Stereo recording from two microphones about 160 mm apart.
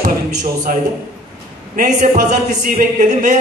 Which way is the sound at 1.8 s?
55° right (ahead or behind).